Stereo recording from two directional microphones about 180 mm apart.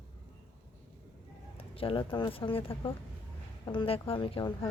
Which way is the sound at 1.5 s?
30° left (ahead or behind).